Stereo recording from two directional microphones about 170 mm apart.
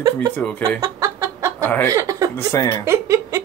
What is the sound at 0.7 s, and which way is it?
Chicken, 20° right (ahead or behind).